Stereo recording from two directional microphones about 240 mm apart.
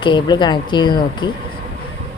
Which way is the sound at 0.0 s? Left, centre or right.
Centre.